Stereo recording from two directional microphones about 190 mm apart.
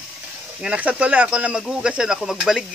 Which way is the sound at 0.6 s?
5° right (ahead or behind).